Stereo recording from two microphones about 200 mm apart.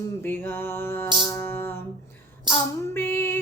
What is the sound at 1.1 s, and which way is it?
Music, 20° right (ahead or behind).